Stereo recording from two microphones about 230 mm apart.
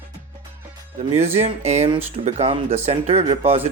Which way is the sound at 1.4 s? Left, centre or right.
Right.